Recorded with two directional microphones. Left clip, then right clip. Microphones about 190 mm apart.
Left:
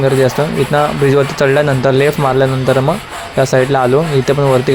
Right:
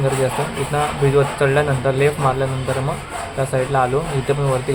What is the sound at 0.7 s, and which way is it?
A man's voice, 40° left (ahead or behind).